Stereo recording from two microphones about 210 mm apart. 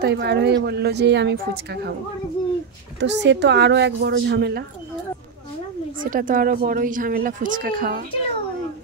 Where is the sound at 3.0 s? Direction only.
55° right (ahead or behind).